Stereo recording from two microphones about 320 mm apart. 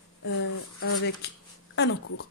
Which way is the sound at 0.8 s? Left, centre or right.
Left.